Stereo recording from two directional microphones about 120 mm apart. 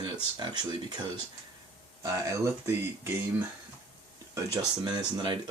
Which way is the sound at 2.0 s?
25° right (ahead or behind).